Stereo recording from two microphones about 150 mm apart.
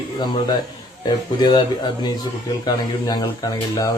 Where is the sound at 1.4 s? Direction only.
30° left (ahead or behind).